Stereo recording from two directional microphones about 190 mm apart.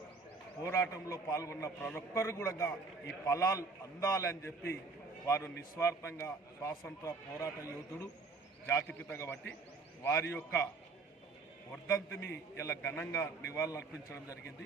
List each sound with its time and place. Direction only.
0.6 s speech: 15° left (ahead or behind)
8.6 s speech: 10° left (ahead or behind)
11.9 s speech: 15° left (ahead or behind)